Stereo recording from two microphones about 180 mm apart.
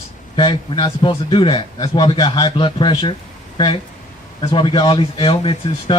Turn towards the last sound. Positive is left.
turn(degrees=30)  # may be behind; listen again after turning